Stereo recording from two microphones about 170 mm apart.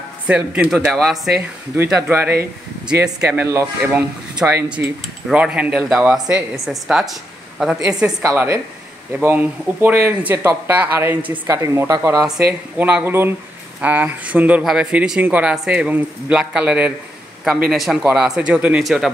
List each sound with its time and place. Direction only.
0.3 s speech: 5° right (ahead or behind)
1.8 s a woman's voice: 15° right (ahead or behind)
8.2 s speech: 15° right (ahead or behind)